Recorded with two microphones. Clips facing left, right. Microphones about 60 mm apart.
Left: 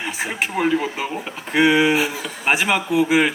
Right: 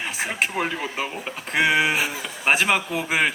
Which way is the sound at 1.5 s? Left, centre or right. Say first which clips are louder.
Left 4 dB; centre.